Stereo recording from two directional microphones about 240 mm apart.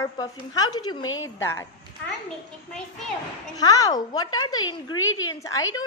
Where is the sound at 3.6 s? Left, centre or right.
Centre.